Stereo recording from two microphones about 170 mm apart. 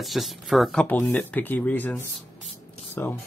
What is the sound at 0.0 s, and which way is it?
Speech, centre (ahead or behind).